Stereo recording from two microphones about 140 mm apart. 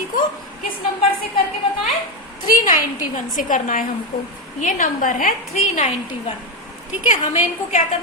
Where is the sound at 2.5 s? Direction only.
70° left (ahead or behind).